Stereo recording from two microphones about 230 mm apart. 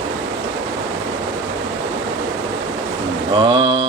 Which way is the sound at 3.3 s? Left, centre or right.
Right.